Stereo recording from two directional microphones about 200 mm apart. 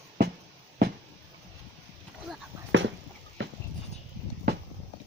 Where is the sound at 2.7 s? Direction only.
70° right (ahead or behind).